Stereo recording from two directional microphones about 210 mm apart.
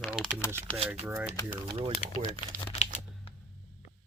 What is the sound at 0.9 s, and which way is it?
Speech, 5° right (ahead or behind).